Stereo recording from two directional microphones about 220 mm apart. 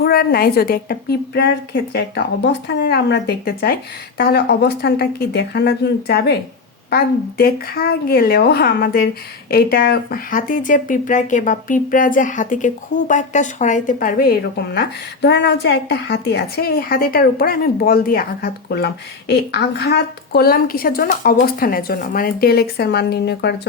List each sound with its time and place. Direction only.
0.0 s a woman's voice: 45° left (ahead or behind)